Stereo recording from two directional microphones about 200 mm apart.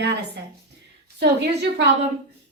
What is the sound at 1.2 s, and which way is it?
Speech, 60° right (ahead or behind).